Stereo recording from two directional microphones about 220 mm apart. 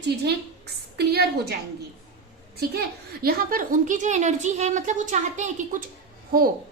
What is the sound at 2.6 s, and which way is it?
A woman's voice, 45° right (ahead or behind).